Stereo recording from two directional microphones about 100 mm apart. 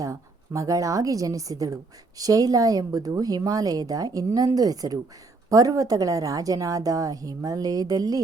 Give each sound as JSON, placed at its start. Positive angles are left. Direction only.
{"t": 0.0, "sound": "a woman's voice", "side_deg": -35}